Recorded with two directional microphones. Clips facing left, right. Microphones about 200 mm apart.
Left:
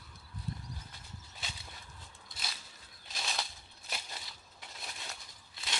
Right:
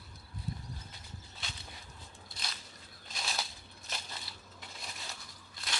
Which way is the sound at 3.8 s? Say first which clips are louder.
Even; 10° left (ahead or behind).